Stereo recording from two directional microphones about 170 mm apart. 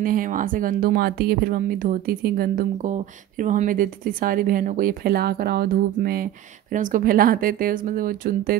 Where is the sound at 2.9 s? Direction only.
45° right (ahead or behind).